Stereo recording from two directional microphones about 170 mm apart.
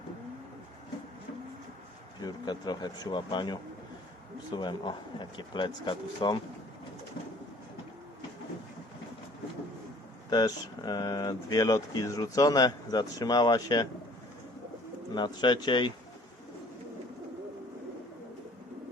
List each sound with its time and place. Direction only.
2.2 s speech: 25° left (ahead or behind)
10.2 s speech: 25° left (ahead or behind)
15.1 s speech: 25° left (ahead or behind)